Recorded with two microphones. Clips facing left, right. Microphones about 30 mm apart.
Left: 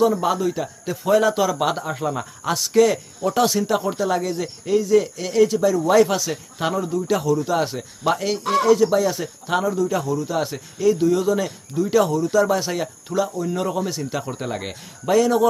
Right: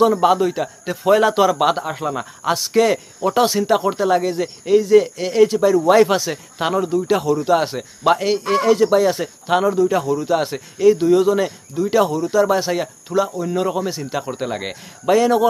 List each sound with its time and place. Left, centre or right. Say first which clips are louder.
0.0 s a man's voice: right 4 dB; right